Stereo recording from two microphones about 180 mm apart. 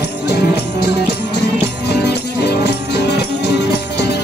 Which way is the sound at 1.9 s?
65° left (ahead or behind).